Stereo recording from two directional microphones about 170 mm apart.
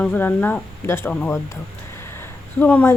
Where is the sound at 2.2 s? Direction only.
10° left (ahead or behind).